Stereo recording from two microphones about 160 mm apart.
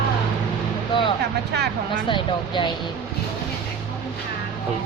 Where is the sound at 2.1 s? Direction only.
30° left (ahead or behind).